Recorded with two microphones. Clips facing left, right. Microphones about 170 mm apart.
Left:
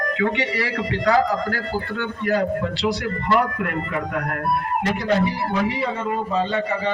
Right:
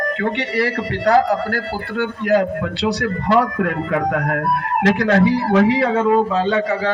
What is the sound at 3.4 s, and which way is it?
A man's voice, 90° right.